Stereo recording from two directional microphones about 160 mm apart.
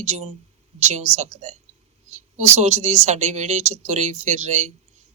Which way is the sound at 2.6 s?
45° right (ahead or behind).